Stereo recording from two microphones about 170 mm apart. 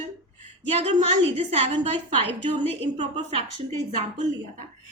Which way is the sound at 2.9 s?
35° right (ahead or behind).